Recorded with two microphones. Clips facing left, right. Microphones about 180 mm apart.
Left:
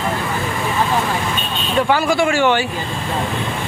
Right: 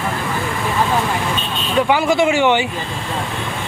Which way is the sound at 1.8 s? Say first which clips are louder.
Right 2 dB; 20° right (ahead or behind).